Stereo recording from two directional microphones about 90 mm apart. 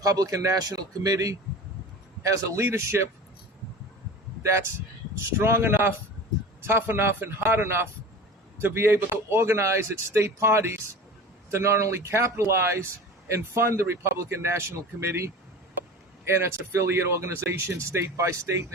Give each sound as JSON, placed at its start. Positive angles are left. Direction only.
{"t": 0.0, "sound": "speech", "side_deg": -40}
{"t": 4.4, "sound": "a man's voice", "side_deg": -30}
{"t": 16.2, "sound": "speech", "side_deg": -30}